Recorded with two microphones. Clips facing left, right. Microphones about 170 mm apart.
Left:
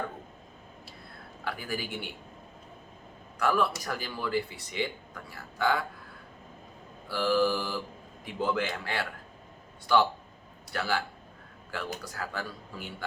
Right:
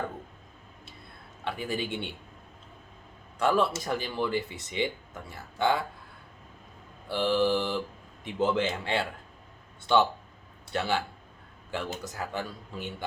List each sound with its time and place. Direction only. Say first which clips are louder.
1.5 s speech: right 3 dB; 25° right (ahead or behind)
3.3 s speech: right 2 dB; 25° right (ahead or behind)
7.1 s speech: right 1 dB; 25° right (ahead or behind)